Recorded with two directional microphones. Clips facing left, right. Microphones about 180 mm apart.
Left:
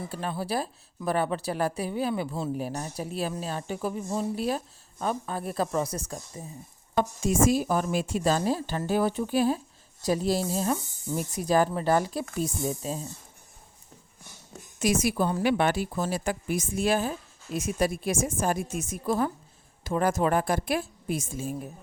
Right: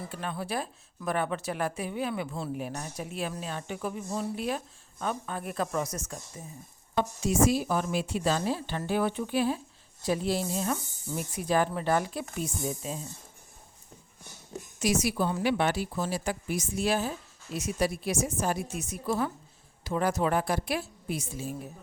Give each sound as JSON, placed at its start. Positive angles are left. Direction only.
{"t": 0.1, "sound": "speech", "side_deg": 35}
{"t": 6.9, "sound": "a woman's voice", "side_deg": 50}
{"t": 14.8, "sound": "a woman's voice", "side_deg": 50}